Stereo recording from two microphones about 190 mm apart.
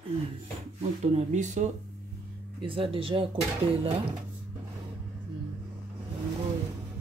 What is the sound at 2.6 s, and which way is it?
Speech, 30° right (ahead or behind).